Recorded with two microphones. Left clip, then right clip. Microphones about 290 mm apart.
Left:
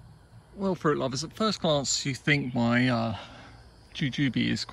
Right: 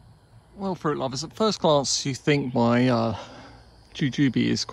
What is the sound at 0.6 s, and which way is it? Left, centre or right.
A man's voice, centre.